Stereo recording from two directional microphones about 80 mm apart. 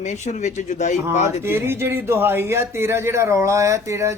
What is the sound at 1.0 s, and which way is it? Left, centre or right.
Speech, right.